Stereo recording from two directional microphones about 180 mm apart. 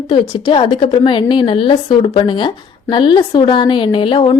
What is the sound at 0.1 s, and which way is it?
A woman's voice, 25° left (ahead or behind).